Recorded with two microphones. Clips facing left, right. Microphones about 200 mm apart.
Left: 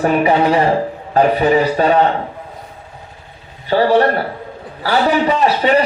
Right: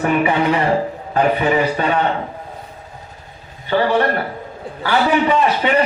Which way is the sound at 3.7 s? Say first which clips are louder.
Left 4 dB; 35° left (ahead or behind).